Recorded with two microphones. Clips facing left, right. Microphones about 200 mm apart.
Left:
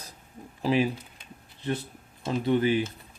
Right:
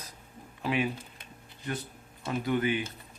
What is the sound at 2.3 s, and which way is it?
Speech, 30° left (ahead or behind).